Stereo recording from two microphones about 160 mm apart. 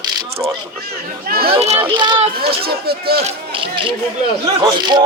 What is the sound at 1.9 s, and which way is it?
Speech, 30° right (ahead or behind).